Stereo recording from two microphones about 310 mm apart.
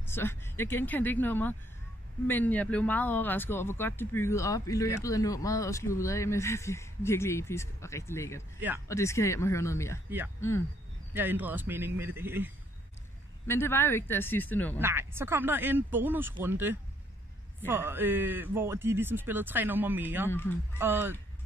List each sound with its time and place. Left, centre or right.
0.0 s speech: centre
8.5 s speech: centre
8.8 s speech: centre
10.0 s speech: centre
13.5 s speech: centre
14.8 s speech: centre
20.2 s speech: centre
20.7 s speech: centre